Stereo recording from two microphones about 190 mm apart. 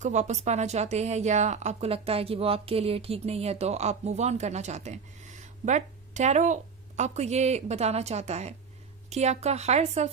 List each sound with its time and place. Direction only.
0.0 s a woman's voice: 35° right (ahead or behind)